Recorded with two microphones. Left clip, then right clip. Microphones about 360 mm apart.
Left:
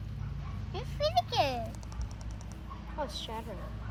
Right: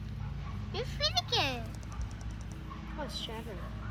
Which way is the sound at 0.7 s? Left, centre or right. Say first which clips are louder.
Left 2 dB; centre.